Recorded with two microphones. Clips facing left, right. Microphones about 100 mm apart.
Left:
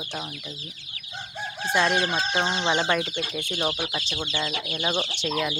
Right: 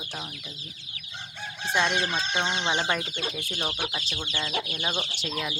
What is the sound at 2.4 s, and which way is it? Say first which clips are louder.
Speech: left 3 dB; 35° left (ahead or behind).